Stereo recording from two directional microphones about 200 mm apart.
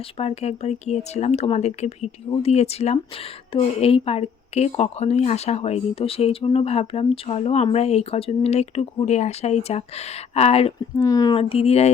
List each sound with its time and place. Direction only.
0.0 s speech: 30° left (ahead or behind)
10.9 s speech: 20° left (ahead or behind)